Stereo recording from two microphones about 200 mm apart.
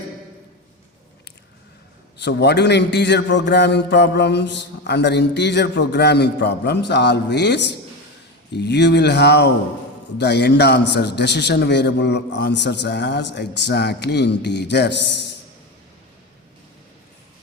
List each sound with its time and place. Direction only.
2.2 s a man's voice: 55° left (ahead or behind)